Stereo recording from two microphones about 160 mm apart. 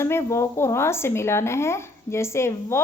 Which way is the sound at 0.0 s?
15° left (ahead or behind).